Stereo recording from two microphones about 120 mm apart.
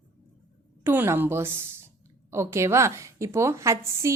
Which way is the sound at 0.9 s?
20° right (ahead or behind).